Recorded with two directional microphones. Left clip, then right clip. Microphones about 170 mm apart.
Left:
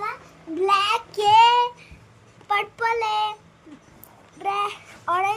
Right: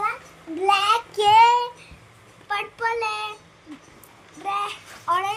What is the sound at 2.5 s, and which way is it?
Speech, 30° left (ahead or behind).